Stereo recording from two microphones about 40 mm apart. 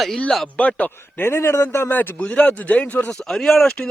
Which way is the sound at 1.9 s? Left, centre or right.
Left.